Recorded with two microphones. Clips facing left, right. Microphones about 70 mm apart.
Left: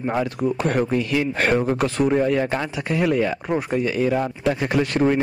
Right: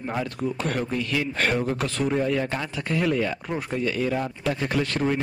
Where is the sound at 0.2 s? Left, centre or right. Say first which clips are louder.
Left 6 dB; centre.